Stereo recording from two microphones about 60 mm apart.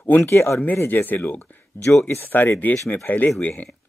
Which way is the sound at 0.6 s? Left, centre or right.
Left.